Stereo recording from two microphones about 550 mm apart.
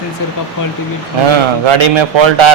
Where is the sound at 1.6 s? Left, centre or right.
Right.